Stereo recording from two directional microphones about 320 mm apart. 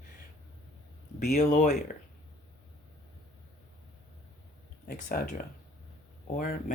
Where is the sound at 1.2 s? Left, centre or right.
Left.